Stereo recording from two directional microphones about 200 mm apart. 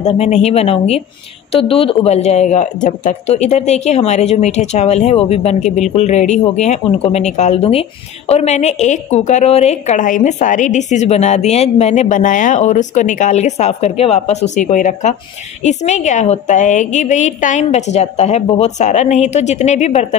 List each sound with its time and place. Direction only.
0.0 s a woman's voice: 35° left (ahead or behind)